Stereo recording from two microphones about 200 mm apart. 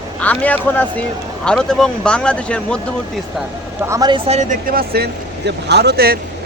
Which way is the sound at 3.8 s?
15° right (ahead or behind).